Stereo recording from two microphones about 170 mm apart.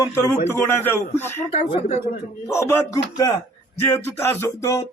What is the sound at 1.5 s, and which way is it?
Speech, 35° left (ahead or behind).